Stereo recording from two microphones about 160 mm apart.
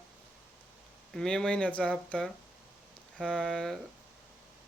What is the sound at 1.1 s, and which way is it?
Speech, 5° left (ahead or behind).